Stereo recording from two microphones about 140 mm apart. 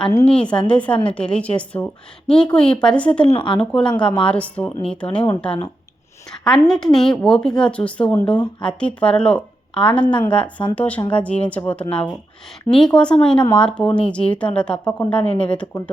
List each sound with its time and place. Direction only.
0.3 s a woman's voice: 5° left (ahead or behind)
3.3 s speech: 35° left (ahead or behind)
3.6 s a woman's voice: 5° left (ahead or behind)